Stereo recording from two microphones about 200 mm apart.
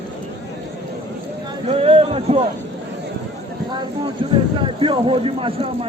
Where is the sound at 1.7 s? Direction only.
30° right (ahead or behind).